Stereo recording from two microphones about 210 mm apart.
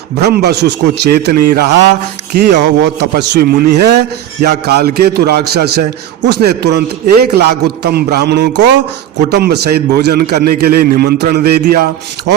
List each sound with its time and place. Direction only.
0.2 s a man's voice: 50° right (ahead or behind)